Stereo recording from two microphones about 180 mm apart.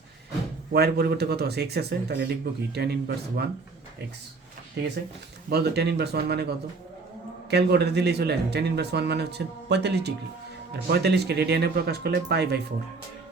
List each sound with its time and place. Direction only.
0.7 s speech: 60° right (ahead or behind)
5.5 s speech: 60° right (ahead or behind)
7.5 s speech: 65° right (ahead or behind)